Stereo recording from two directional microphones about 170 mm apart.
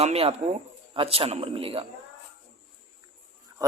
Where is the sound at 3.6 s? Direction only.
20° right (ahead or behind).